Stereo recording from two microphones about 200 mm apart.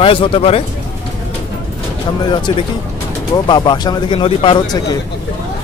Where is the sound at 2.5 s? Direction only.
25° left (ahead or behind).